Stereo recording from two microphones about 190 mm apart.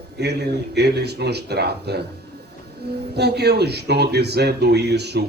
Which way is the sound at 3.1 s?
60° right (ahead or behind).